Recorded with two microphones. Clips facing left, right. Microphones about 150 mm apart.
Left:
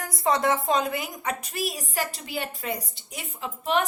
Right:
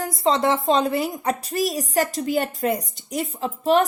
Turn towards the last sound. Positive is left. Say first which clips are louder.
# right 7 dB
turn(degrees=-35)  # may be behind; listen again after turning